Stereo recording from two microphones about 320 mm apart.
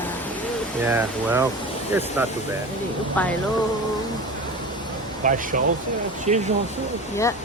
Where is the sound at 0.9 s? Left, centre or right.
Centre.